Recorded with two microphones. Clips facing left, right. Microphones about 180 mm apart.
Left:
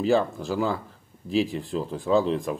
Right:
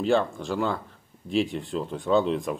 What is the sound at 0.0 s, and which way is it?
Speech, 5° left (ahead or behind).